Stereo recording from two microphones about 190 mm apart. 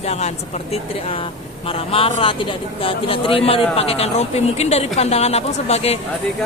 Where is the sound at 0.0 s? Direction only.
35° left (ahead or behind).